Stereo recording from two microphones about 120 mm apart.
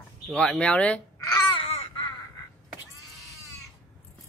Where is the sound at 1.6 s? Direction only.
50° left (ahead or behind).